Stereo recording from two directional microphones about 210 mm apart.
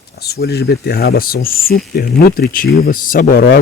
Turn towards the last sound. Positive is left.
turn(degrees=45)  # may be behind; listen again after turning